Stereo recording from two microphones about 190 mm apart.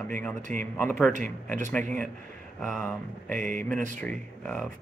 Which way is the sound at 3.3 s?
45° right (ahead or behind).